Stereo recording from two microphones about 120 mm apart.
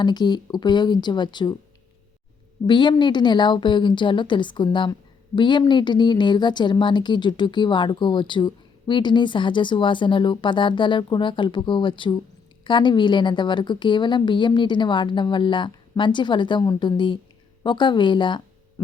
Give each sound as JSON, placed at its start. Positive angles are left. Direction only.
{"t": 0.0, "sound": "a woman's voice", "side_deg": 35}
{"t": 2.6, "sound": "a woman's voice", "side_deg": 40}